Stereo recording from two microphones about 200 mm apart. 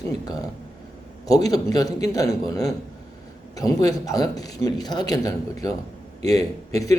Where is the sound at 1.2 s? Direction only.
20° left (ahead or behind).